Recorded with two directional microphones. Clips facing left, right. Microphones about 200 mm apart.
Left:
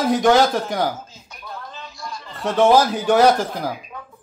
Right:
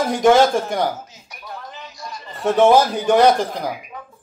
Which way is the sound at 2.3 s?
Centre (ahead or behind).